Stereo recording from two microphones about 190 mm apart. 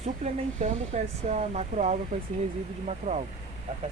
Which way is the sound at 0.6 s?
35° right (ahead or behind).